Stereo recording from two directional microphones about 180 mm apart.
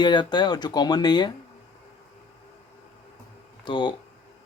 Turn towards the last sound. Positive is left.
turn(degrees=25)  # may be behind; listen again after turning